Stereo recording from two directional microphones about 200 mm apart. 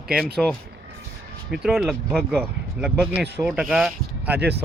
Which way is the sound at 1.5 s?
Centre (ahead or behind).